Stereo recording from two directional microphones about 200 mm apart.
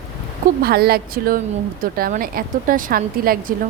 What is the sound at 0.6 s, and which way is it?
Speech, 50° right (ahead or behind).